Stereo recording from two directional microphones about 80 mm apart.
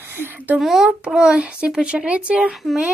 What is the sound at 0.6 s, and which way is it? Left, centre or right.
Speech, centre.